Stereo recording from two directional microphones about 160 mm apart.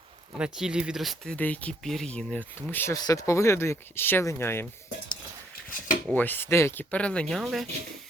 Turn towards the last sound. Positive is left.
turn(degrees=0)  # may be behind; listen again after turning